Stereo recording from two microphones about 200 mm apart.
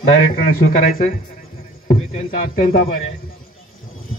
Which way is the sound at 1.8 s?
40° left (ahead or behind).